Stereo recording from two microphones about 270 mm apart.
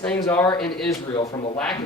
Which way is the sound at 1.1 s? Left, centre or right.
Centre.